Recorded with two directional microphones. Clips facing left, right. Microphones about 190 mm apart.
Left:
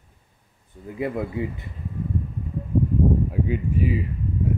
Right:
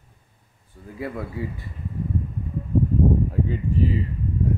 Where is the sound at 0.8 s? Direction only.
20° left (ahead or behind).